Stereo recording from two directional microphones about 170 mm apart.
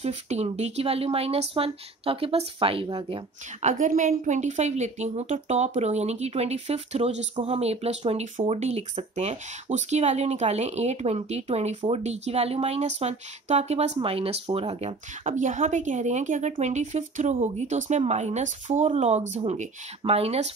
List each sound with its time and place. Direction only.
0.0 s a woman's voice: 40° right (ahead or behind)
3.6 s a woman's voice: 50° right (ahead or behind)